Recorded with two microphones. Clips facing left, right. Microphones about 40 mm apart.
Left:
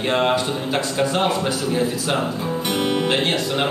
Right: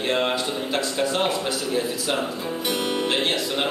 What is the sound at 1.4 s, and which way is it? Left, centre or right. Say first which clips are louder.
Speech: left 4 dB; centre.